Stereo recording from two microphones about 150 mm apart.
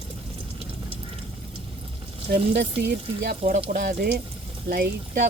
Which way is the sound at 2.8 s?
90° right.